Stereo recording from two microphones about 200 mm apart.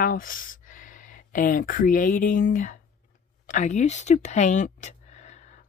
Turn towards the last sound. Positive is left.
turn(degrees=35)  # may be behind; listen again after turning